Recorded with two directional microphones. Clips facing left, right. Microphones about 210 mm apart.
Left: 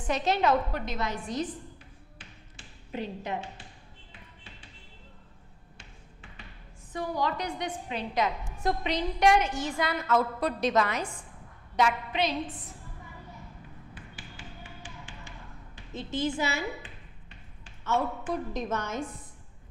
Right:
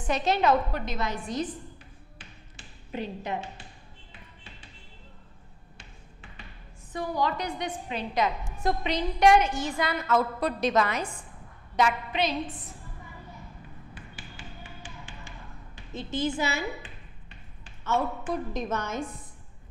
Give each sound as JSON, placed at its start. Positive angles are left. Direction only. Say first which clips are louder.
{"t": 0.0, "sound": "a woman's voice", "louder": "right 1 dB", "side_deg": -10}
{"t": 2.1, "sound": "tap", "louder": "right 1 dB", "side_deg": -10}
{"t": 5.8, "sound": "tap", "louder": "right 1 dB", "side_deg": -15}
{"t": 7.2, "sound": "a woman's voice", "louder": "right 2 dB", "side_deg": -10}
{"t": 12.6, "sound": "a sound", "louder": "right 1 dB", "side_deg": -20}
{"t": 13.9, "sound": "tap", "louder": "right 1 dB", "side_deg": -15}
{"t": 18.0, "sound": "a woman's voice", "louder": "right 1 dB", "side_deg": -20}